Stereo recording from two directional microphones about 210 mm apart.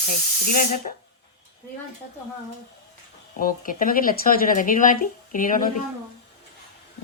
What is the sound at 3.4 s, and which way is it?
Speech, 40° left (ahead or behind).